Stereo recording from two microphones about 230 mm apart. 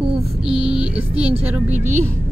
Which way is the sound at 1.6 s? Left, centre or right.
Right.